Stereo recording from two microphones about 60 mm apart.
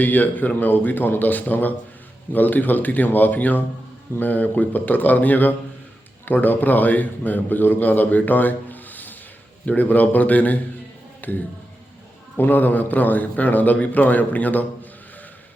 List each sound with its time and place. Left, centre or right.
0.0 s a man's voice: left
12.4 s a man's voice: left